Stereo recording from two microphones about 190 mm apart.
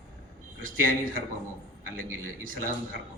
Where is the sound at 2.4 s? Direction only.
45° right (ahead or behind).